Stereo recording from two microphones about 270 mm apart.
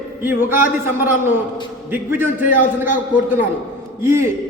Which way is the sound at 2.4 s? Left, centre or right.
Left.